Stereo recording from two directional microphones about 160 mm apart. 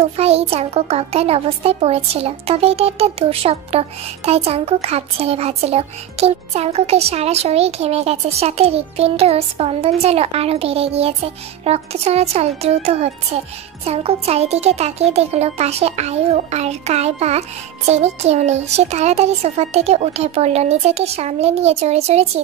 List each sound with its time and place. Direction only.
0.0 s a child's voice: 40° right (ahead or behind)